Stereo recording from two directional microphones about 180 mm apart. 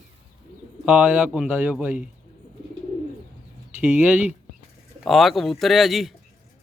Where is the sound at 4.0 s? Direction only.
10° right (ahead or behind).